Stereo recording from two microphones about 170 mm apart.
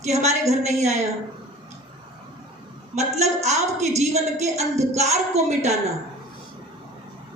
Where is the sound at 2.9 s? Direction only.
40° right (ahead or behind).